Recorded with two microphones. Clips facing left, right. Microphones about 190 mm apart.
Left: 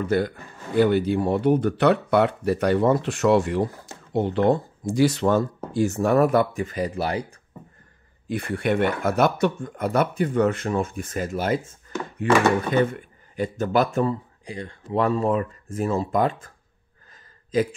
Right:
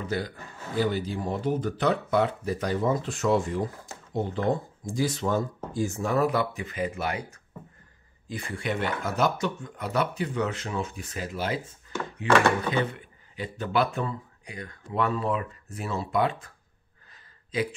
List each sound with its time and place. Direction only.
0.0 s a man's voice: 55° left (ahead or behind); by 7.3 s 35° left (ahead or behind)
8.3 s speech: 60° left (ahead or behind); by 14.8 s 30° left (ahead or behind)
15.0 s speech: 40° left (ahead or behind)